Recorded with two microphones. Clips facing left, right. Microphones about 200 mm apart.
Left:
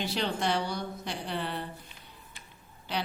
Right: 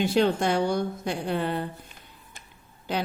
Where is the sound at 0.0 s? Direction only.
50° right (ahead or behind).